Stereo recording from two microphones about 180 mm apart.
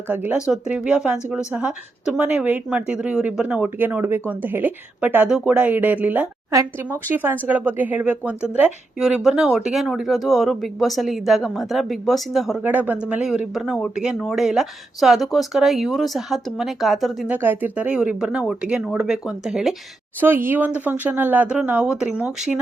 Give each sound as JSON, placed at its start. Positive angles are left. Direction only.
{"t": 0.1, "sound": "speech", "side_deg": -10}